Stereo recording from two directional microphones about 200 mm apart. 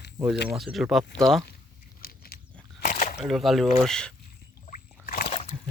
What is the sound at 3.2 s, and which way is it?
Speech, centre (ahead or behind).